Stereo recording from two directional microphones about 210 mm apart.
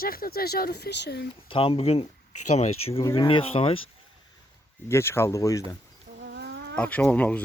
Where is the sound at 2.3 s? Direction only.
90° left.